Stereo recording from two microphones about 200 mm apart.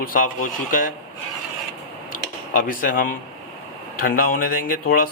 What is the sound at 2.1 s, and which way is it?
Speech, 45° left (ahead or behind).